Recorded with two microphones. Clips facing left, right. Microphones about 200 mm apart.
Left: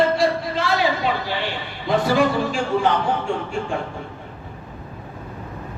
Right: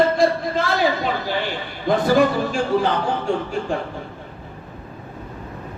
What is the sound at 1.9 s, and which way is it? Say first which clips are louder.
Speech: right 2 dB; 45° right (ahead or behind).